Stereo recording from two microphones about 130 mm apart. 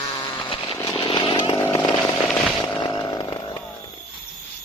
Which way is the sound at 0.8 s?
25° left (ahead or behind).